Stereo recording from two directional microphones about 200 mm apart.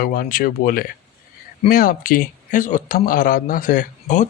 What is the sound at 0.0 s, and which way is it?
Speech, 45° left (ahead or behind).